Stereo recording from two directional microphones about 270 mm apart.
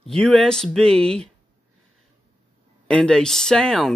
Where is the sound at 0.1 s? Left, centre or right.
Centre.